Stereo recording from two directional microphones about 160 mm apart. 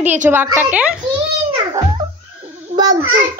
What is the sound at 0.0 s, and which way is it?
Speech, 10° right (ahead or behind).